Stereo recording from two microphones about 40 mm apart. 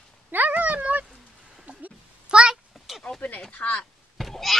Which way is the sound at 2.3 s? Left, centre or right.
Right.